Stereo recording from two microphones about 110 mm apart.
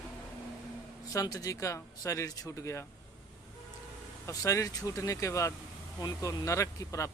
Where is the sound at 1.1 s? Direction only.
30° left (ahead or behind).